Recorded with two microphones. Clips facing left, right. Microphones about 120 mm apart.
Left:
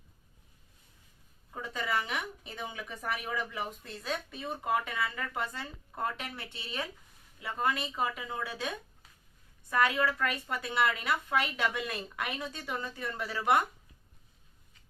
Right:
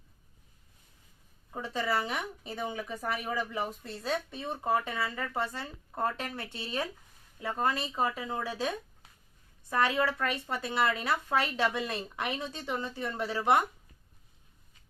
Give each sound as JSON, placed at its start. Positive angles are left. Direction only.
{"t": 1.5, "sound": "speech", "side_deg": -30}